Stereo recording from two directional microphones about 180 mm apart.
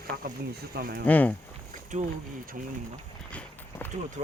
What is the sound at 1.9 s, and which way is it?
Speech, 40° right (ahead or behind).